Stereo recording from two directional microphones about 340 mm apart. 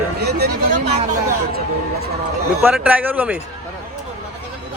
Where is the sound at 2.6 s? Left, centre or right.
Centre.